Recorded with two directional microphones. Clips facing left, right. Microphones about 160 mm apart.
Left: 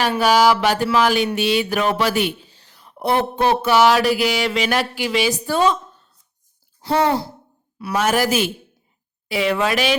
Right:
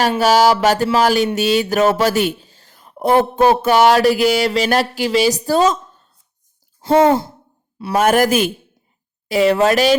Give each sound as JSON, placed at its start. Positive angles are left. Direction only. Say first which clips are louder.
{"t": 0.2, "sound": "speech", "louder": "right 2 dB", "side_deg": -45}
{"t": 6.8, "sound": "speech", "louder": "right 6 dB", "side_deg": -25}
{"t": 7.9, "sound": "speech", "louder": "right 5 dB", "side_deg": -50}
{"t": 9.3, "sound": "speech", "louder": "right 6 dB", "side_deg": -40}